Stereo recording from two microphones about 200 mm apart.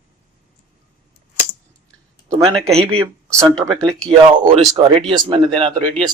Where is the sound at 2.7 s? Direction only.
30° right (ahead or behind).